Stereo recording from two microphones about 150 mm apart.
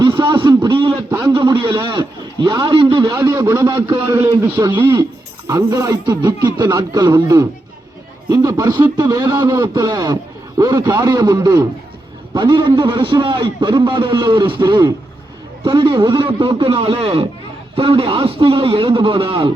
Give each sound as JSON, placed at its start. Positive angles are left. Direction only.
{"t": 0.0, "sound": "a sound", "side_deg": -30}
{"t": 1.2, "sound": "a man's voice", "side_deg": -30}
{"t": 3.2, "sound": "a man's voice", "side_deg": -20}